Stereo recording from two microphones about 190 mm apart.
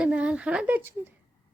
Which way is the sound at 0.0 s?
5° right (ahead or behind).